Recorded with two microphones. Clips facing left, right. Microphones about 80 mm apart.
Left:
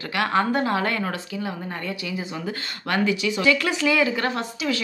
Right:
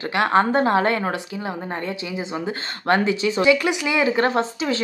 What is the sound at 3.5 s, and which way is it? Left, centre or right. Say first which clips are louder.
Speech: right 2 dB; centre.